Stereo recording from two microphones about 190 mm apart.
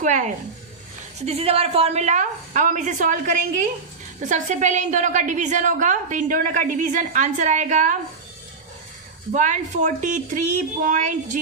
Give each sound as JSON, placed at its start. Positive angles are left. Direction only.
{"t": 0.0, "sound": "a woman's voice", "side_deg": -40}
{"t": 9.3, "sound": "a woman's voice", "side_deg": -40}